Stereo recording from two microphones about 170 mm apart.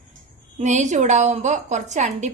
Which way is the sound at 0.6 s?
45° right (ahead or behind).